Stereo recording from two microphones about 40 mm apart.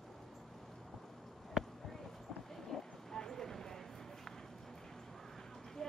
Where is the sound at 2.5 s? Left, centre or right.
Centre.